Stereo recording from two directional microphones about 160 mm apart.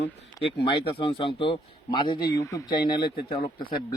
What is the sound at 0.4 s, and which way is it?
A man's voice, 35° left (ahead or behind).